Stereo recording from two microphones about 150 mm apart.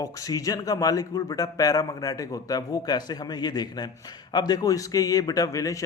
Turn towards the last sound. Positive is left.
turn(degrees=20)  # may be behind; listen again after turning